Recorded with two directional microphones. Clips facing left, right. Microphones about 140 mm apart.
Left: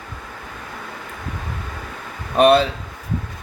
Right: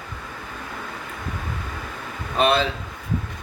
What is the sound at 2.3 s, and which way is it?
Speech, 45° left (ahead or behind).